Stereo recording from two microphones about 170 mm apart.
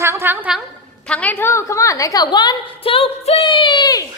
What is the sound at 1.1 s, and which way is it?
Speech, 10° left (ahead or behind).